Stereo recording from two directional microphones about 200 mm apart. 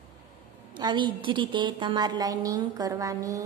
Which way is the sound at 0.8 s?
20° right (ahead or behind).